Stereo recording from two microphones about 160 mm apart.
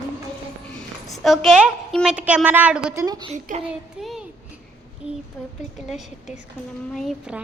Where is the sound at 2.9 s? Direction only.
20° right (ahead or behind).